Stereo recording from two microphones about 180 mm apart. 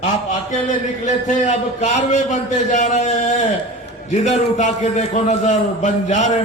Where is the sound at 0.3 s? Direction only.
45° left (ahead or behind).